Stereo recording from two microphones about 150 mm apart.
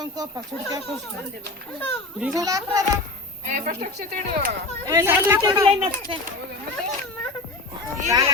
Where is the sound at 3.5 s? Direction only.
65° right (ahead or behind).